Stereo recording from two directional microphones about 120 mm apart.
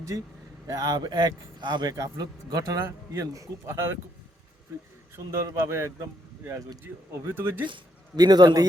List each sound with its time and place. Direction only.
0.7 s a man's voice: 30° right (ahead or behind)
5.1 s a man's voice: 25° right (ahead or behind)
7.6 s speech: 35° right (ahead or behind)